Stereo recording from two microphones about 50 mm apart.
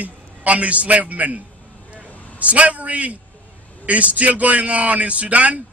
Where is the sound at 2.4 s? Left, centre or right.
Right.